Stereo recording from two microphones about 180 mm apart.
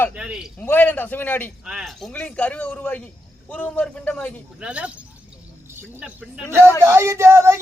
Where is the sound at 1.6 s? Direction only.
Centre (ahead or behind).